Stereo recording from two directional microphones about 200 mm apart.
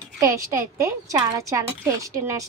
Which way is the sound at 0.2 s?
15° right (ahead or behind).